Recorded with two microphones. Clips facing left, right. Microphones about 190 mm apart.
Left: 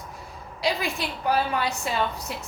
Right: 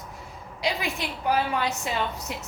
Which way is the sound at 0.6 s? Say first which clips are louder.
Left 2 dB; 15° right (ahead or behind).